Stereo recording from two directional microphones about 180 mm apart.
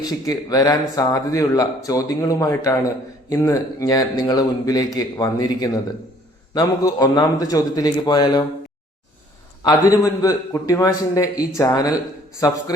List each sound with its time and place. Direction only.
0.0 s speech: 20° left (ahead or behind)
9.6 s speech: 20° left (ahead or behind)